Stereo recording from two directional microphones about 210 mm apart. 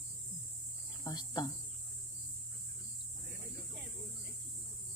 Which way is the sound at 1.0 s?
20° left (ahead or behind).